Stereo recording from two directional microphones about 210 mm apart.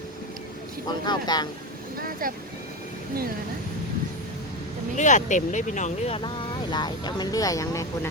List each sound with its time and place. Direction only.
0.9 s speech: 20° left (ahead or behind)
2.0 s boat: 45° right (ahead or behind)
4.9 s speech: 35° left (ahead or behind); by 7.9 s 15° left (ahead or behind)